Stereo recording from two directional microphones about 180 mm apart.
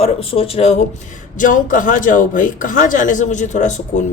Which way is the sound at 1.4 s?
45° left (ahead or behind).